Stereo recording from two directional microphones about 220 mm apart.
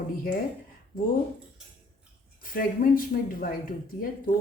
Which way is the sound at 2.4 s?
40° left (ahead or behind).